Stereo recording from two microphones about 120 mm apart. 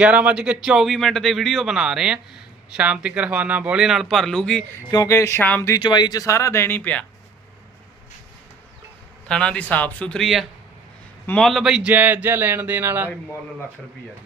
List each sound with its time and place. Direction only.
0.0 s a man's voice: 10° right (ahead or behind); by 4.6 s 5° left (ahead or behind)
4.9 s speech: 30° left (ahead or behind)
5.8 s speech: 35° left (ahead or behind); by 7.0 s 15° left (ahead or behind)
9.3 s speech: 10° left (ahead or behind); by 13.1 s 20° right (ahead or behind)